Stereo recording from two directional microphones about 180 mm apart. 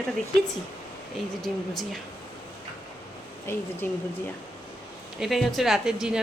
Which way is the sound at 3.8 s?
10° left (ahead or behind).